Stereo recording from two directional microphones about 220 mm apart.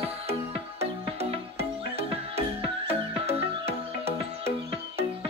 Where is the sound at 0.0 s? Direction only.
30° right (ahead or behind).